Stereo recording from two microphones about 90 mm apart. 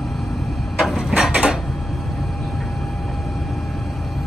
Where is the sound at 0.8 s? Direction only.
Centre (ahead or behind).